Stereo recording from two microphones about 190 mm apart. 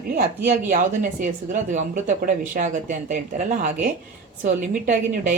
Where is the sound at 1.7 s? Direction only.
40° right (ahead or behind).